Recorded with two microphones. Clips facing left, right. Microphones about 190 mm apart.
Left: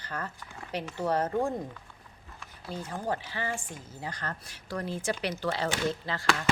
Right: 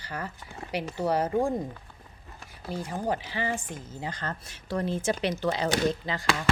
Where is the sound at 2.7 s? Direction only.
15° right (ahead or behind).